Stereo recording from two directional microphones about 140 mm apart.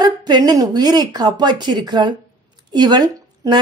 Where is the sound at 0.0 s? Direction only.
30° right (ahead or behind).